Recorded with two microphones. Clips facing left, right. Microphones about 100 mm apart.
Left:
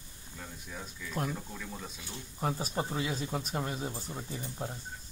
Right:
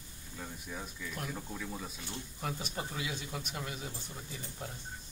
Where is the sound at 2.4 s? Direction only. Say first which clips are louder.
Left 7 dB; 35° left (ahead or behind).